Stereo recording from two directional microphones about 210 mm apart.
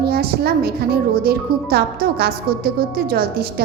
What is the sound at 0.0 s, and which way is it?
A woman's voice, 50° right (ahead or behind).